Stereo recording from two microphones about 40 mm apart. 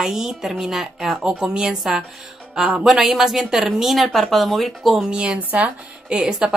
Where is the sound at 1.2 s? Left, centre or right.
Centre.